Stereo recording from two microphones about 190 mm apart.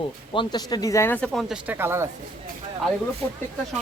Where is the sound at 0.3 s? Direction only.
20° left (ahead or behind); by 2.0 s 10° right (ahead or behind).